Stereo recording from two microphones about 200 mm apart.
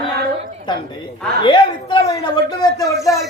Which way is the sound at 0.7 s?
20° left (ahead or behind).